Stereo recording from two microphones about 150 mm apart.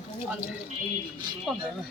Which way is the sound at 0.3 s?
10° right (ahead or behind).